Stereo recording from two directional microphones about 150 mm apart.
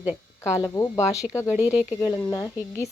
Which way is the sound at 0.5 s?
20° left (ahead or behind).